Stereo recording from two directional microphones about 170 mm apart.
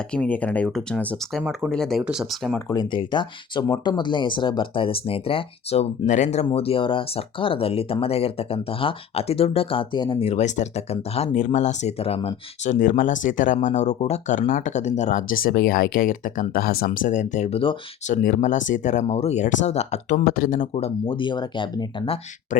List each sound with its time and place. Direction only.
0.1 s speech: 10° left (ahead or behind)
2.6 s speech: 25° left (ahead or behind)
18.1 s speech: 50° left (ahead or behind)
20.2 s speech: 60° left (ahead or behind)
20.7 s speech: 35° left (ahead or behind)